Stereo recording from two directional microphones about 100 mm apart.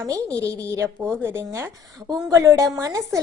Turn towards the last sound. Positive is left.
turn(degrees=-35)  # may be behind; listen again after turning